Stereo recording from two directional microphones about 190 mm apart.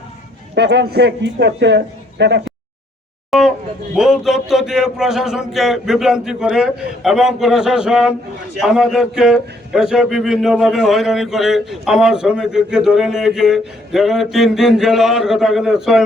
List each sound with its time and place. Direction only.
0.5 s a man's voice: 65° right (ahead or behind)
3.2 s a sound: centre (ahead or behind)
3.9 s a man's voice: 5° right (ahead or behind)